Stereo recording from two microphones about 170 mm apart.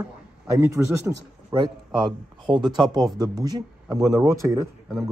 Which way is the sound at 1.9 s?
25° right (ahead or behind).